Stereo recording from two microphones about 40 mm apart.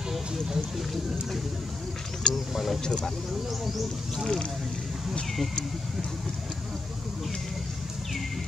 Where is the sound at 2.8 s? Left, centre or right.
Centre.